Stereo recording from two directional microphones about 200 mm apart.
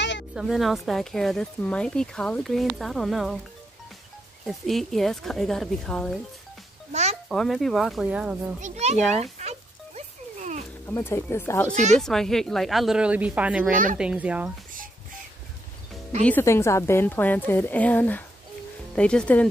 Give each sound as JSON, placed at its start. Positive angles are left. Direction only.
{"t": 0.3, "sound": "speech", "side_deg": 0}
{"t": 4.5, "sound": "speech", "side_deg": 0}
{"t": 6.9, "sound": "music", "side_deg": -35}
{"t": 7.2, "sound": "speech", "side_deg": 0}
{"t": 8.5, "sound": "a child's voice", "side_deg": -35}
{"t": 9.2, "sound": "a sound", "side_deg": -35}
{"t": 10.9, "sound": "a woman's voice", "side_deg": 10}
{"t": 11.7, "sound": "a child's voice", "side_deg": -35}
{"t": 12.0, "sound": "speech", "side_deg": 0}
{"t": 16.3, "sound": "a woman's voice", "side_deg": 10}